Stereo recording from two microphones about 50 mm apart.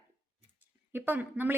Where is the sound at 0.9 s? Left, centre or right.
Right.